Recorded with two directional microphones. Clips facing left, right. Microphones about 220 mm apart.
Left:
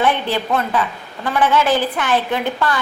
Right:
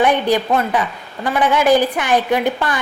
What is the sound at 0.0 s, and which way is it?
A woman's voice, 15° right (ahead or behind).